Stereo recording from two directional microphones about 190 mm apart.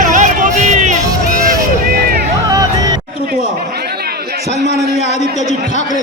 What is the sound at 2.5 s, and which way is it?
Music, 20° right (ahead or behind).